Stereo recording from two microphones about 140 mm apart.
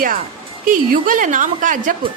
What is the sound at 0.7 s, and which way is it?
A woman's voice, 70° right (ahead or behind).